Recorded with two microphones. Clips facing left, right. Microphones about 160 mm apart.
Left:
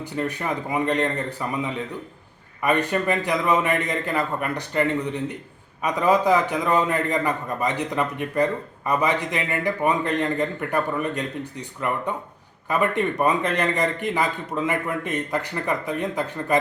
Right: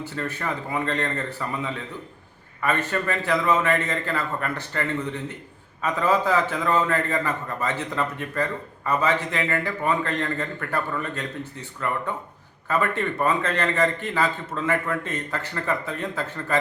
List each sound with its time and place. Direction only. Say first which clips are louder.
0.0 s a man's voice: left 3 dB; 15° left (ahead or behind)